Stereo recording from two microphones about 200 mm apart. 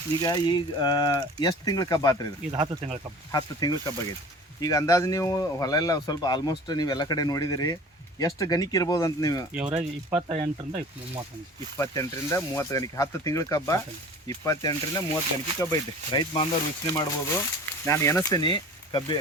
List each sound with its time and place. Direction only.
0.2 s speech: 20° left (ahead or behind)
2.5 s speech: 25° right (ahead or behind)
3.3 s speech: 20° left (ahead or behind)
9.5 s speech: 5° right (ahead or behind)
10.7 s speech: 30° right (ahead or behind)
11.8 s speech: 15° left (ahead or behind)